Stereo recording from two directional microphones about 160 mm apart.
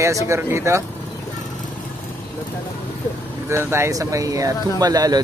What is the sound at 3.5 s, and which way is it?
Speech, 15° right (ahead or behind).